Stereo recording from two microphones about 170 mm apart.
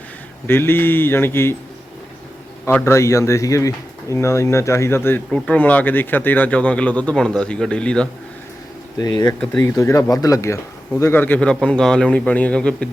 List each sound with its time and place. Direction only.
0.4 s speech: 15° left (ahead or behind)
2.6 s speech: 15° left (ahead or behind)
9.0 s speech: 20° left (ahead or behind)
9.4 s speech: 10° left (ahead or behind)